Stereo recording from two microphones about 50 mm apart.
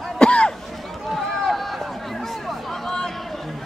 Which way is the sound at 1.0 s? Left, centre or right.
Centre.